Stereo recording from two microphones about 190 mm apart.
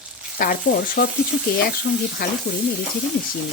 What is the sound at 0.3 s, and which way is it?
Speech, 50° left (ahead or behind).